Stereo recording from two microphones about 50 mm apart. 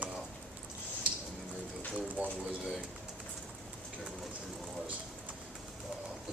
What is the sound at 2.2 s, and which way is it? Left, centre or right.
Speech, right.